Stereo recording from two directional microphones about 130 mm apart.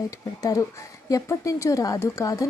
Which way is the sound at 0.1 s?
25° left (ahead or behind).